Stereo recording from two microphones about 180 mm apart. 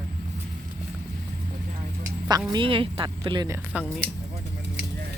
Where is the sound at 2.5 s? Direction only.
30° right (ahead or behind).